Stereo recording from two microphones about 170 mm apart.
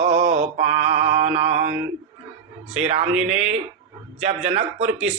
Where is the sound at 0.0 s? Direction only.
40° right (ahead or behind).